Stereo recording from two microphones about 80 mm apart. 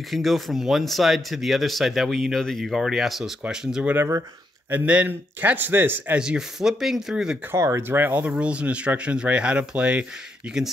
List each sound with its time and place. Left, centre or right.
0.1 s speech: centre
4.6 s speech: centre
6.1 s speech: centre
7.5 s speech: right; by 10.6 s centre